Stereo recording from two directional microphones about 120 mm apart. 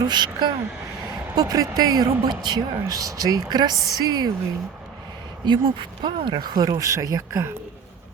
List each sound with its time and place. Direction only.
0.0 s speech: 35° right (ahead or behind)
5.5 s speech: 40° right (ahead or behind)